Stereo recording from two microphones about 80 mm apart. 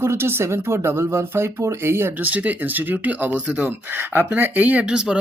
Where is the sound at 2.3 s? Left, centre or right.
Centre.